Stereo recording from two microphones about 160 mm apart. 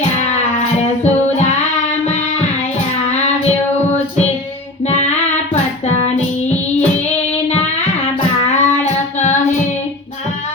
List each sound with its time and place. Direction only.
4.9 s music: 40° left (ahead or behind)
8.5 s child singing: 45° left (ahead or behind)